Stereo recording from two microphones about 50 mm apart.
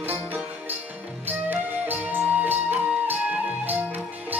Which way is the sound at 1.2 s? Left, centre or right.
Right.